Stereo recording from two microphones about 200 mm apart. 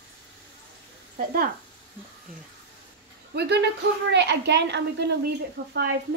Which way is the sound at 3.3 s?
55° right (ahead or behind).